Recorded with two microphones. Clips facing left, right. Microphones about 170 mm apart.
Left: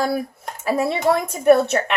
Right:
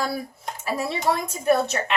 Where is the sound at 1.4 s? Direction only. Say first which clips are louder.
Left 6 dB; 60° left (ahead or behind).